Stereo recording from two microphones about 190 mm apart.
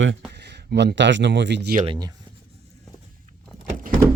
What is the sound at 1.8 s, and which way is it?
Speech, 20° right (ahead or behind).